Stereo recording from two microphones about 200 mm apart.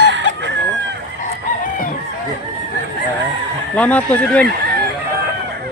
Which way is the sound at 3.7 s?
5° left (ahead or behind).